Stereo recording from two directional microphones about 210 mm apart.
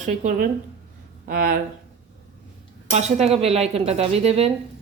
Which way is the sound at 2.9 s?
30° right (ahead or behind).